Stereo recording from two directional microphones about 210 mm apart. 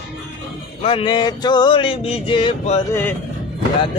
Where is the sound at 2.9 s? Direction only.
10° left (ahead or behind).